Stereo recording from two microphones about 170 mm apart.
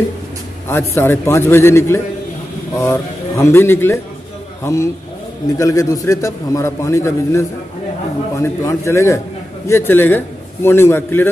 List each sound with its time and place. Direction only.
0.7 s a man's voice: 15° left (ahead or behind)